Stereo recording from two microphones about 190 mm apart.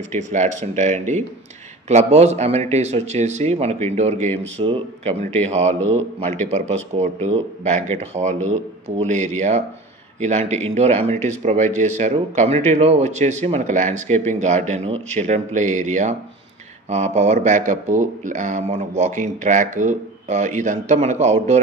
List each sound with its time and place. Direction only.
0.1 s speech: 40° right (ahead or behind)